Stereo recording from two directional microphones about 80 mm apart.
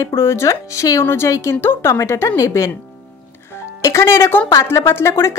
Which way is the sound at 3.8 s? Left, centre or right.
Left.